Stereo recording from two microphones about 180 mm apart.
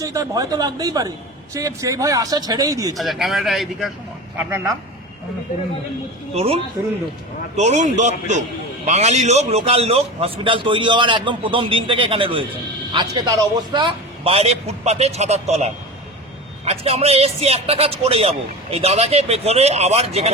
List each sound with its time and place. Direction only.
0.0 s a man's voice: 20° right (ahead or behind)
3.0 s speech: centre (ahead or behind)
4.4 s speech: 15° right (ahead or behind)
6.3 s a man's voice: 35° right (ahead or behind)
14.3 s a man's voice: 35° right (ahead or behind)